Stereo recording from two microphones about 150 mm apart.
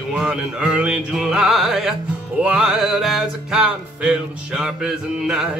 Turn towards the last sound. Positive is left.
turn(degrees=-5)  # may be behind; listen again after turning